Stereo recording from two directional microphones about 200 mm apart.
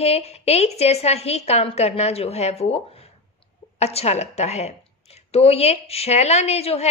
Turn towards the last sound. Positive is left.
turn(degrees=30)  # may be behind; listen again after turning